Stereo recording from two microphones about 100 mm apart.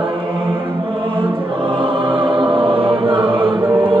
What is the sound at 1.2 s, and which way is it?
Choir, 60° right (ahead or behind).